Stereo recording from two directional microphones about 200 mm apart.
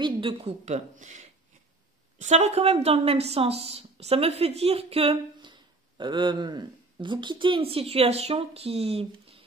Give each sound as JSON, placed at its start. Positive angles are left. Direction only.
{"t": 0.0, "sound": "a woman's voice", "side_deg": -25}